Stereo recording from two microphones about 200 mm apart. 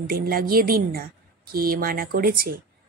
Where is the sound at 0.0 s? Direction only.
45° right (ahead or behind).